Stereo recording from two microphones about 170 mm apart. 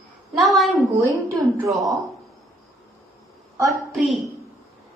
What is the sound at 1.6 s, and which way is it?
Speech, 20° right (ahead or behind).